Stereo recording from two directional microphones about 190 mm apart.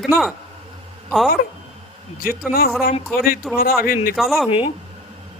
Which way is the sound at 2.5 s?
55° left (ahead or behind).